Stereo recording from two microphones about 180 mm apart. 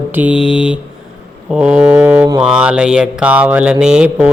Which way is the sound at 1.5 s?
5° right (ahead or behind).